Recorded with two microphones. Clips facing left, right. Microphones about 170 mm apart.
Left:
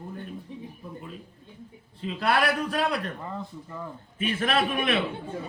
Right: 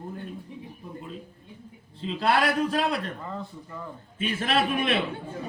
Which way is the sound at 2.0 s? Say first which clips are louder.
Right 1 dB; 30° right (ahead or behind).